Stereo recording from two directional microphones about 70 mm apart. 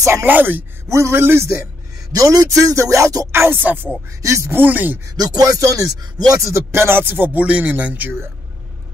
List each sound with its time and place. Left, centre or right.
0.2 s speech: right
0.8 s speech: right
2.1 s speech: right
3.3 s speech: right
4.2 s speech: right
4.6 s speech: right
5.1 s rapping: right
6.3 s speech: right